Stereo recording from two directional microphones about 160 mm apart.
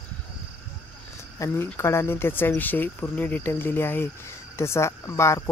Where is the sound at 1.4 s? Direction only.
15° left (ahead or behind).